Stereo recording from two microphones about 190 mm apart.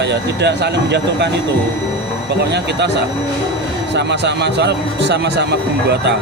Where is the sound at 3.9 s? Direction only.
65° right (ahead or behind).